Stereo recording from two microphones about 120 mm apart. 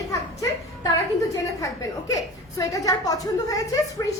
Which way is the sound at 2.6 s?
30° left (ahead or behind).